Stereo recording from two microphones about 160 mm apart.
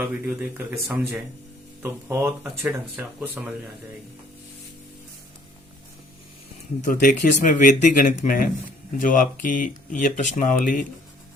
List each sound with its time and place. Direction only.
0.1 s speech: 10° right (ahead or behind)
1.8 s speech: 15° right (ahead or behind)
6.8 s speech: 55° left (ahead or behind)